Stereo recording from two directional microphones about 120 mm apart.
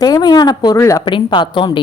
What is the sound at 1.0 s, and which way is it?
Speech, 40° left (ahead or behind).